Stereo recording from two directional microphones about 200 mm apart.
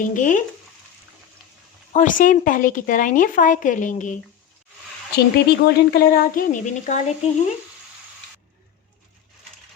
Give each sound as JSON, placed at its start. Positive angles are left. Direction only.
{"t": 0.0, "sound": "speech", "side_deg": 40}
{"t": 1.9, "sound": "speech", "side_deg": 40}
{"t": 5.1, "sound": "speech", "side_deg": 55}